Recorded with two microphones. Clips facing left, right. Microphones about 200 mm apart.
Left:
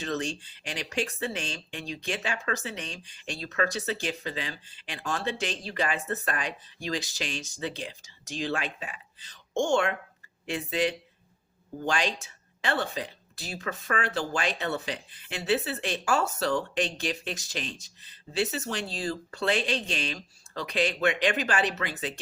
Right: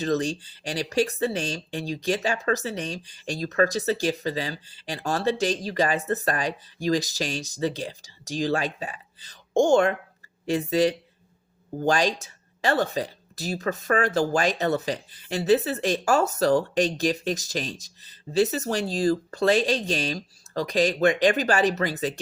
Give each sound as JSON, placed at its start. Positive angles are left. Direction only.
{"t": 0.0, "sound": "speech", "side_deg": -35}